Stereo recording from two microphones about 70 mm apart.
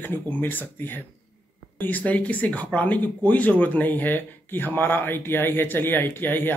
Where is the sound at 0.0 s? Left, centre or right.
Left.